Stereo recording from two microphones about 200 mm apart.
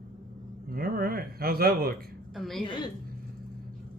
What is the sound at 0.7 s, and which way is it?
Speech, 50° right (ahead or behind).